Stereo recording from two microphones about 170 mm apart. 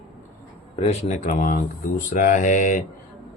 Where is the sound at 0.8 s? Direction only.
40° left (ahead or behind).